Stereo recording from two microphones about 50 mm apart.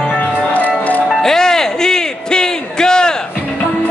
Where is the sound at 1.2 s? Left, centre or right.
Centre.